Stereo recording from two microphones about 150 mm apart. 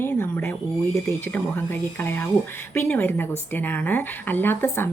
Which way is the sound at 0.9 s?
15° left (ahead or behind).